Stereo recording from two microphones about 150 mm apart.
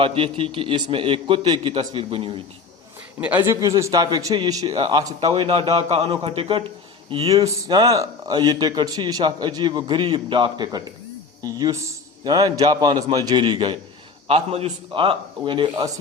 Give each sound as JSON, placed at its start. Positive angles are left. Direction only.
{"t": 0.0, "sound": "a man's voice", "side_deg": -35}
{"t": 3.2, "sound": "a man's voice", "side_deg": -10}
{"t": 7.3, "sound": "a man's voice", "side_deg": -20}